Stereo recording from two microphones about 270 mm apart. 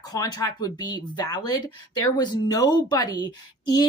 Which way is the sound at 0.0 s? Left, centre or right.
Centre.